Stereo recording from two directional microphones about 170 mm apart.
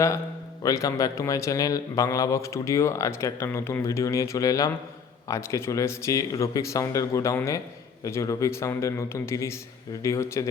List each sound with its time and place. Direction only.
0.6 s a man's voice: 20° left (ahead or behind)